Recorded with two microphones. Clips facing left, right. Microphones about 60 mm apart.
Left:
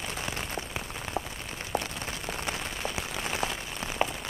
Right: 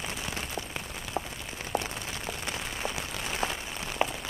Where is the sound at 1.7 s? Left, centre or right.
Left.